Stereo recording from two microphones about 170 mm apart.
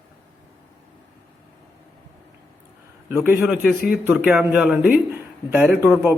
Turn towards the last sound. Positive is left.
turn(degrees=-15)  # may be behind; listen again after turning